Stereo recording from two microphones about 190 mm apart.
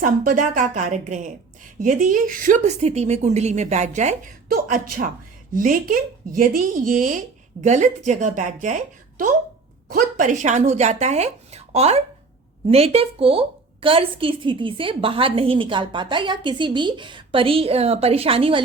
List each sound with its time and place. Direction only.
0.0 s a woman's voice: 45° right (ahead or behind)